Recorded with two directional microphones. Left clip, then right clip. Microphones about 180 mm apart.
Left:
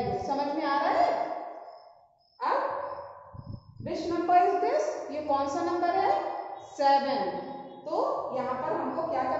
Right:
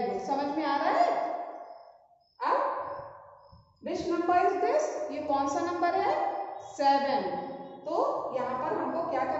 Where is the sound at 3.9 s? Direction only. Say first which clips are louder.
Left 2 dB; 15° left (ahead or behind).